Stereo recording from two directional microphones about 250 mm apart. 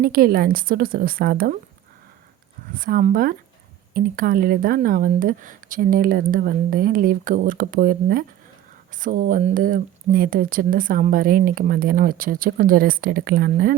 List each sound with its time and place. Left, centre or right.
0.0 s speech: right
2.7 s speech: right